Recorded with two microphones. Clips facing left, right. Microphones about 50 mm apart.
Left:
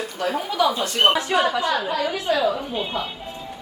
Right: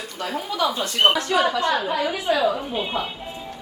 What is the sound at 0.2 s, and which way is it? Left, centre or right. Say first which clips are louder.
Speech: left 3 dB; left.